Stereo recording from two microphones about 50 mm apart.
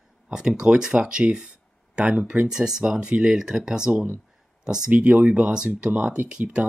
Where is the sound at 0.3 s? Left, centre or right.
Centre.